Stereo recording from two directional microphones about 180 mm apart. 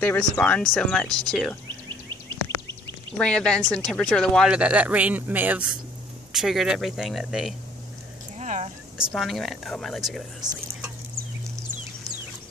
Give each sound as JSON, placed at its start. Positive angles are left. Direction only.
{"t": 0.0, "sound": "speech", "side_deg": 10}
{"t": 3.2, "sound": "speech", "side_deg": 5}
{"t": 8.4, "sound": "a sound", "side_deg": -40}
{"t": 8.9, "sound": "speech", "side_deg": 0}